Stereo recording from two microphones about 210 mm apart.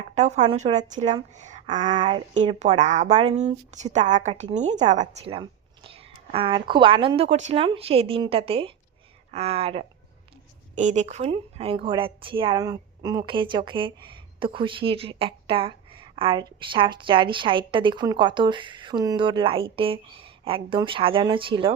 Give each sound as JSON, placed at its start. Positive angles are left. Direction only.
{"t": 0.1, "sound": "a woman's voice", "side_deg": -35}